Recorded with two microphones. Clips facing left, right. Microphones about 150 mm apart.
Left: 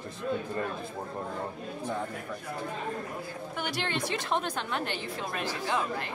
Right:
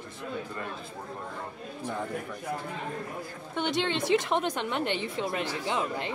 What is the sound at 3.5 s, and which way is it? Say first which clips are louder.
A woman's voice: right 5 dB; 25° right (ahead or behind).